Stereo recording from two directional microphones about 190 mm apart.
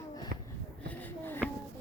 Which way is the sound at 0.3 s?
55° right (ahead or behind).